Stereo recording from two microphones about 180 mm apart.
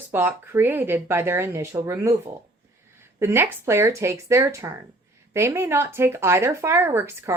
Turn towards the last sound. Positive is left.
turn(degrees=-15)  # may be behind; listen again after turning